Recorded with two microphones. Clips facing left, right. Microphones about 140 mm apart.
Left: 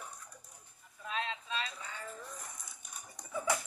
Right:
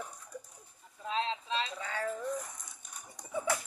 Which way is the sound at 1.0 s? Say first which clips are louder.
Right 5 dB; 25° right (ahead or behind).